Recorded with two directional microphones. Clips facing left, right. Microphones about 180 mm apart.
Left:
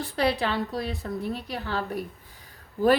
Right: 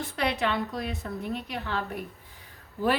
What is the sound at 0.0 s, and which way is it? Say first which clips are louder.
A woman's voice: left 3 dB; 35° left (ahead or behind).